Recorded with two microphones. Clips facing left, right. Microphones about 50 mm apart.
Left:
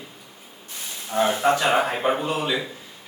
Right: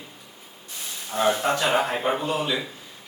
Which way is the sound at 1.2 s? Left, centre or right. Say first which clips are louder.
Left 2 dB; centre.